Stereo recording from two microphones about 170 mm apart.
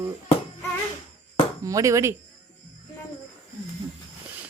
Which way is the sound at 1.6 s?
20° right (ahead or behind).